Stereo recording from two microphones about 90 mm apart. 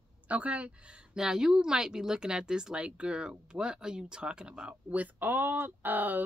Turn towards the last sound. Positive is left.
turn(degrees=-20)  # may be behind; listen again after turning